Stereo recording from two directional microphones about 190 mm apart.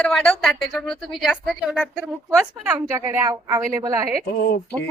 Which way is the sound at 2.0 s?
5° right (ahead or behind).